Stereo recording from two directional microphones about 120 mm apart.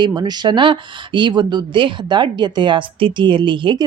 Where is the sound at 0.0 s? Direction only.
35° right (ahead or behind).